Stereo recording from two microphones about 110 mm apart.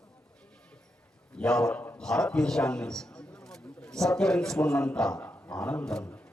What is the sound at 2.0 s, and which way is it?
A man's voice, 5° left (ahead or behind).